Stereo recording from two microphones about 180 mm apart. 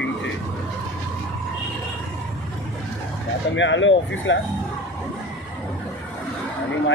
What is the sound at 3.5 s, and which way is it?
Speech, 90° left.